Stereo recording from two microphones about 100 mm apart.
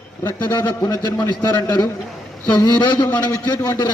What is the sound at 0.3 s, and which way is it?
A man's voice, 45° left (ahead or behind).